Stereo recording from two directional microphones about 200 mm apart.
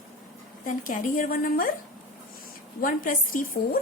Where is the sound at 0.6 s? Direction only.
45° left (ahead or behind).